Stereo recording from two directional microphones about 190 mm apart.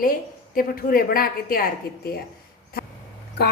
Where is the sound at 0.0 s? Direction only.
50° left (ahead or behind).